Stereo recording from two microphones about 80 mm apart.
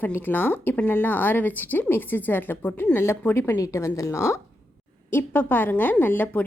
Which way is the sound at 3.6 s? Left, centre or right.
Left.